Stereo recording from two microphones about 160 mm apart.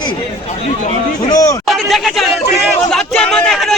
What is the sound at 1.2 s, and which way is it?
Speech, 20° left (ahead or behind).